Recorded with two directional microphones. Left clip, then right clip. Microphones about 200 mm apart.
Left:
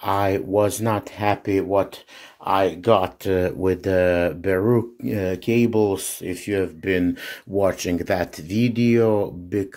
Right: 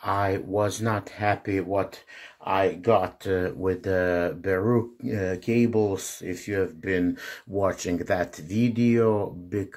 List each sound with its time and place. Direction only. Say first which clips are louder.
0.0 s speech: left 4 dB; 30° left (ahead or behind)
2.4 s speech: left 4 dB; 40° left (ahead or behind)